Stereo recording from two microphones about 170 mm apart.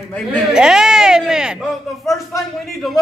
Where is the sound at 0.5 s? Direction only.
5° right (ahead or behind).